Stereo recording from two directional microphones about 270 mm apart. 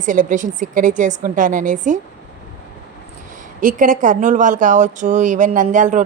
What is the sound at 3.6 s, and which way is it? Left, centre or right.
Speech, right.